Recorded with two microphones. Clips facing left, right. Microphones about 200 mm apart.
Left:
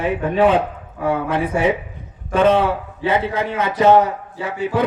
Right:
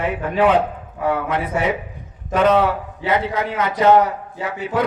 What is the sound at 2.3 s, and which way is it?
A man's voice, 30° left (ahead or behind).